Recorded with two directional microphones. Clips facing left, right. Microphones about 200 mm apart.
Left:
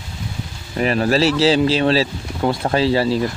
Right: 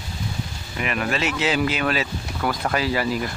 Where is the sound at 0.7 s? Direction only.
35° left (ahead or behind).